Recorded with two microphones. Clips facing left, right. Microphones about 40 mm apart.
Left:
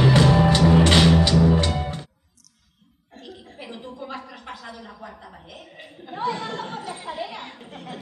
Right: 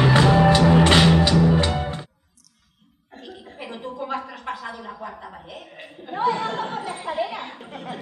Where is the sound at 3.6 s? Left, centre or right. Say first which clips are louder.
Right 5 dB; centre.